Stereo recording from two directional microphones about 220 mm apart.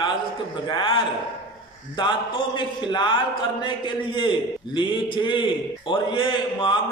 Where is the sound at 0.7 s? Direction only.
20° left (ahead or behind).